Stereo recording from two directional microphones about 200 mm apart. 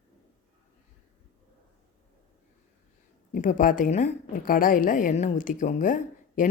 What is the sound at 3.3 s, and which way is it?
A woman's voice, 40° left (ahead or behind).